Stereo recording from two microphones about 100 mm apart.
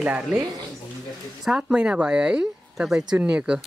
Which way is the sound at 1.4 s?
10° right (ahead or behind).